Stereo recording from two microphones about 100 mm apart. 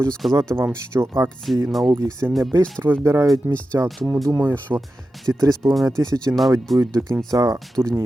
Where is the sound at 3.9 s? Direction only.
Centre (ahead or behind).